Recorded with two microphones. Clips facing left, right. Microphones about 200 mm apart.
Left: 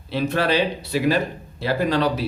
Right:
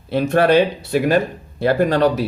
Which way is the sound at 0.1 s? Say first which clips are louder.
Right 7 dB; 50° right (ahead or behind).